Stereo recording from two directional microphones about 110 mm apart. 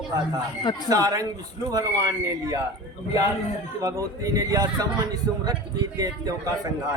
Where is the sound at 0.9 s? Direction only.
35° right (ahead or behind).